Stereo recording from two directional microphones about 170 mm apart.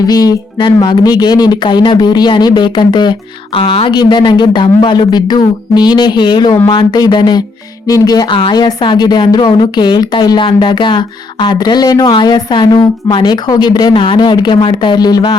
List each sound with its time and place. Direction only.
0.1 s a woman's voice: 25° left (ahead or behind)